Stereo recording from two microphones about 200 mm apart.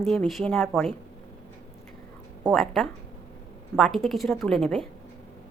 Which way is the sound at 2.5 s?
Centre (ahead or behind).